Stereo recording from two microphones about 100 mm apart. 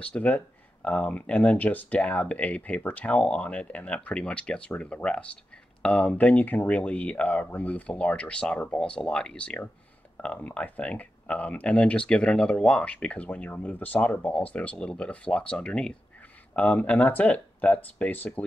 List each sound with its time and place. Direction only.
0.0 s speech: 15° left (ahead or behind)